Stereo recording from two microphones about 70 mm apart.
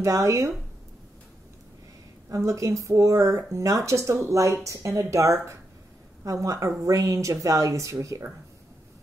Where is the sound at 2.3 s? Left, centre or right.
Right.